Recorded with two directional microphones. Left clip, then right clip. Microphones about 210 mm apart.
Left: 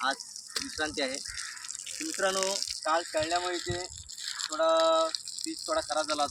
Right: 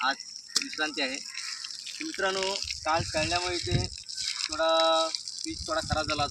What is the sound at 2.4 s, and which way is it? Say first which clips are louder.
Speech: even; 20° left (ahead or behind).